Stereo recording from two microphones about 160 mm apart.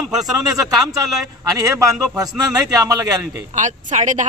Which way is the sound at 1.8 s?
20° right (ahead or behind).